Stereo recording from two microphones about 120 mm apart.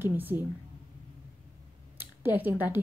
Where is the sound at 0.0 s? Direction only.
15° right (ahead or behind).